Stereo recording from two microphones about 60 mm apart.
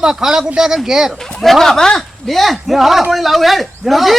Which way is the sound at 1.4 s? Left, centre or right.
Centre.